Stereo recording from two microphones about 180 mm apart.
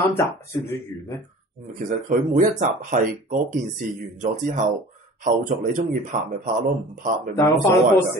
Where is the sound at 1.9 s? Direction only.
45° right (ahead or behind).